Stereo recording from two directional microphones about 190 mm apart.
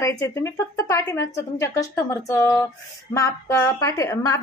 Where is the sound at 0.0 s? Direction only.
15° left (ahead or behind).